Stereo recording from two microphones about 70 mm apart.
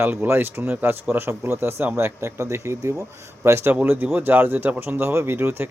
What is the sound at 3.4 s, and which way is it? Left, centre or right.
Speech, right.